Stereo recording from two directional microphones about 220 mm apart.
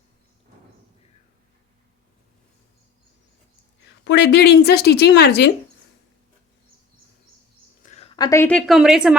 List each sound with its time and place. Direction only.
4.0 s speech: 50° left (ahead or behind)
7.8 s a woman's voice: 30° left (ahead or behind); by 9.1 s 5° right (ahead or behind)